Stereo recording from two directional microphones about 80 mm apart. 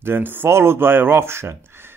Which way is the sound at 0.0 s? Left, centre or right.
Right.